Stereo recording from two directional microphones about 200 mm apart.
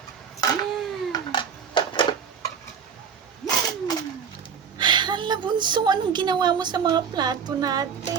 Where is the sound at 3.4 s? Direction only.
Centre (ahead or behind).